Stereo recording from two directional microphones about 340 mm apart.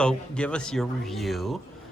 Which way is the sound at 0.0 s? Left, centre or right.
Centre.